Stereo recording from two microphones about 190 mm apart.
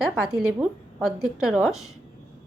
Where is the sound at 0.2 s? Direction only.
5° right (ahead or behind).